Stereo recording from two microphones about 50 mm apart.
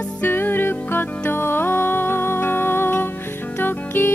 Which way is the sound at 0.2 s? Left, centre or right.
Left.